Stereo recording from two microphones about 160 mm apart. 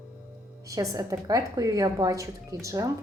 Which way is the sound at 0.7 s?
20° right (ahead or behind).